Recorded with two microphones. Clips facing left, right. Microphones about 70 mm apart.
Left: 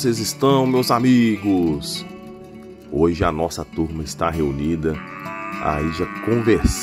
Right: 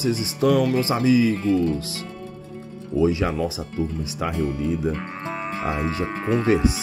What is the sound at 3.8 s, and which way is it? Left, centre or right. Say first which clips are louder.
Speech: left 5 dB; left.